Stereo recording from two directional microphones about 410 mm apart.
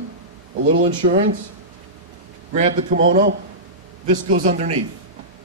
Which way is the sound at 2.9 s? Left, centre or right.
Right.